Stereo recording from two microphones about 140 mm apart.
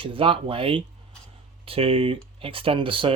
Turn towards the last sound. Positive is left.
turn(degrees=-40)  # may be behind; listen again after turning